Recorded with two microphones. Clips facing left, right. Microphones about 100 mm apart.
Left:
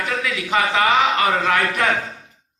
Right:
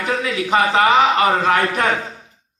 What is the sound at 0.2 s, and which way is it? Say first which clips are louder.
A man's voice: right 3 dB; 35° right (ahead or behind).